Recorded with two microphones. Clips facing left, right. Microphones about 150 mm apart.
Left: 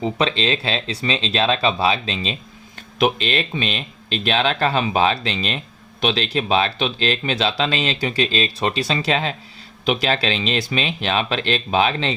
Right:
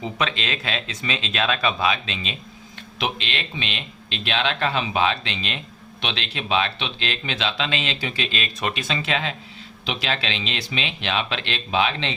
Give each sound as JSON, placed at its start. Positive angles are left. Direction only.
{"t": 0.0, "sound": "speech", "side_deg": 30}